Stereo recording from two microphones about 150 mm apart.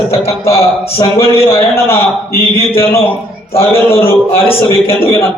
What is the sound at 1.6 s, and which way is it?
Speech, 15° left (ahead or behind).